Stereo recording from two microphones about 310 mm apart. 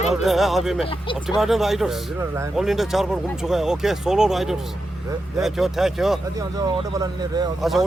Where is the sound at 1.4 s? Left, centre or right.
Centre.